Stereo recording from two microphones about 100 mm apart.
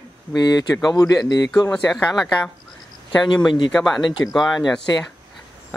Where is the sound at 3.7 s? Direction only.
Centre (ahead or behind).